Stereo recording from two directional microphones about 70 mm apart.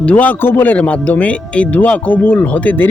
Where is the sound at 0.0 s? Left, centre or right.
Left.